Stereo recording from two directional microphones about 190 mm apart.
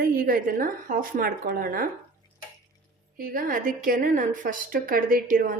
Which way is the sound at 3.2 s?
45° right (ahead or behind).